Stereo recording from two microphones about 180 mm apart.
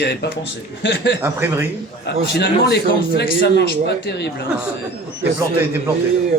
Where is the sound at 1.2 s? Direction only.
15° right (ahead or behind).